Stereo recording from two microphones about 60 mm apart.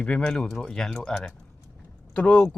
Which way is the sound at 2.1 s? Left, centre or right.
Centre.